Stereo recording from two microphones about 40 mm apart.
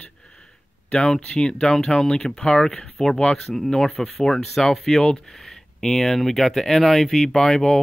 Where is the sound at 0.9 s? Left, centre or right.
Centre.